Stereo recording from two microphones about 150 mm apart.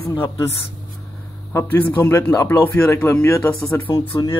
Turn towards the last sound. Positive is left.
turn(degrees=15)  # may be behind; listen again after turning